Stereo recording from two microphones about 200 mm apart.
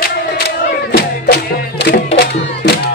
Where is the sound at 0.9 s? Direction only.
50° left (ahead or behind).